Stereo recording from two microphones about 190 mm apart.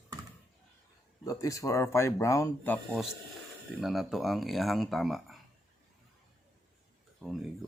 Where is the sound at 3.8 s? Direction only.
Centre (ahead or behind).